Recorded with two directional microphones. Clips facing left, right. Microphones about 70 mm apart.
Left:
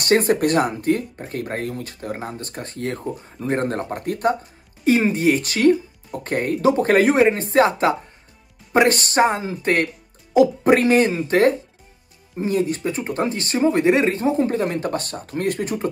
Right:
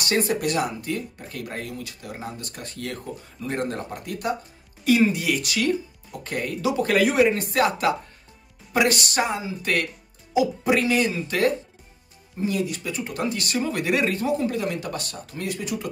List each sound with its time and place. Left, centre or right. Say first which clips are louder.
0.0 s speech: left 6 dB; left